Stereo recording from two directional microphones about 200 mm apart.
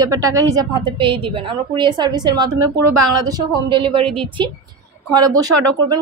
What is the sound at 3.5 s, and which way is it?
Speech, 25° right (ahead or behind).